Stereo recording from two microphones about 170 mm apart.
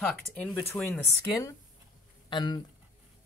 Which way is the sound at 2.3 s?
25° left (ahead or behind).